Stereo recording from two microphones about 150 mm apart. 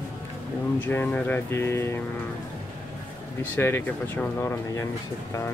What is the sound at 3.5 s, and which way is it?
Speech, 15° left (ahead or behind).